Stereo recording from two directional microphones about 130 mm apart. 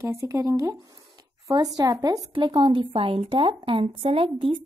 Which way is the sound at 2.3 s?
40° right (ahead or behind).